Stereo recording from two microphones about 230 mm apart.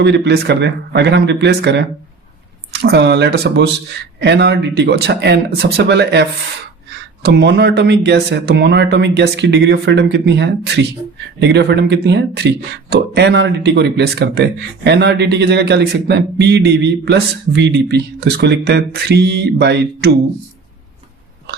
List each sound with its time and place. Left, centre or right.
0.0 s speech: right